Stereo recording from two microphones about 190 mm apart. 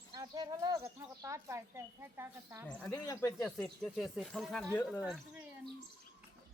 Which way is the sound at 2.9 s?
20° left (ahead or behind).